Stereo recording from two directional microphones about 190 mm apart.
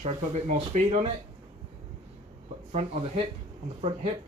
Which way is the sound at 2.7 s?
30° right (ahead or behind).